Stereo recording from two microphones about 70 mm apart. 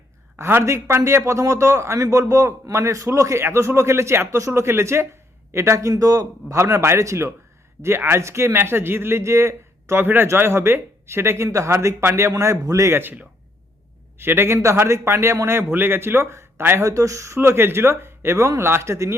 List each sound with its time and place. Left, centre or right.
0.3 s a man's voice: right
5.9 s a man's voice: right
12.3 s a man's voice: right
12.9 s a man's voice: right
16.8 s a man's voice: right